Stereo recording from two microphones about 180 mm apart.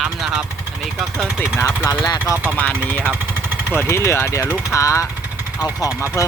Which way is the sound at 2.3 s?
10° right (ahead or behind).